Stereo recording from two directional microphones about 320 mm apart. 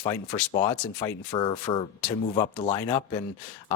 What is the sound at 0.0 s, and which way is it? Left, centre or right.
Speech, centre.